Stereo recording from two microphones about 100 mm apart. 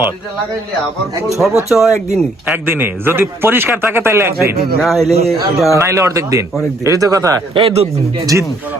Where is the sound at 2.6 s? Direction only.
20° right (ahead or behind).